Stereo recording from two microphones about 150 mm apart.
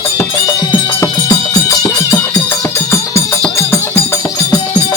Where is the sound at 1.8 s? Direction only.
15° left (ahead or behind).